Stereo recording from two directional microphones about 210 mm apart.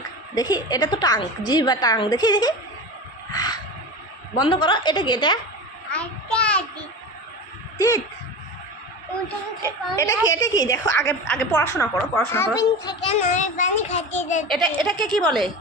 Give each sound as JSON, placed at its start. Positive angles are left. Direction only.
{"t": 0.3, "sound": "a woman's voice", "side_deg": 20}
{"t": 3.3, "sound": "wild animals", "side_deg": 20}
{"t": 4.4, "sound": "a woman's voice", "side_deg": 20}
{"t": 5.9, "sound": "child singing", "side_deg": 5}
{"t": 7.8, "sound": "speech", "side_deg": 15}
{"t": 9.9, "sound": "a woman's voice", "side_deg": 15}
{"t": 13.1, "sound": "child singing", "side_deg": 35}
{"t": 14.4, "sound": "a woman's voice", "side_deg": 0}